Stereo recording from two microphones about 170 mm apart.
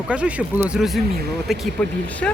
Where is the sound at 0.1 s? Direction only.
5° right (ahead or behind).